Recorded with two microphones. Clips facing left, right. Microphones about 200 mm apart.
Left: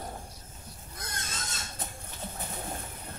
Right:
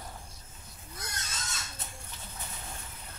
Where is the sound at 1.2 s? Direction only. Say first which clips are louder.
Left 2 dB; 50° left (ahead or behind).